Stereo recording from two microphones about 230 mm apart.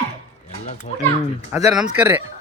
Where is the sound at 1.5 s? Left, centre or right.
Centre.